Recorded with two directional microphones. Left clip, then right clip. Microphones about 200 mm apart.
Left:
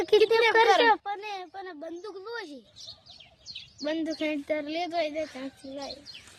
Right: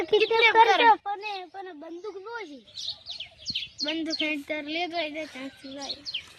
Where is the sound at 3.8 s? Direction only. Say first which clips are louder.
Even; 65° left (ahead or behind).